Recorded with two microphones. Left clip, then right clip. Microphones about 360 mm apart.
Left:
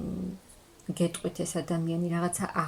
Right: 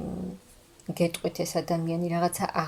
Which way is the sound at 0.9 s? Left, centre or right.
Centre.